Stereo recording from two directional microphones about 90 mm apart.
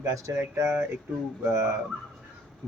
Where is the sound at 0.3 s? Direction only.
30° right (ahead or behind).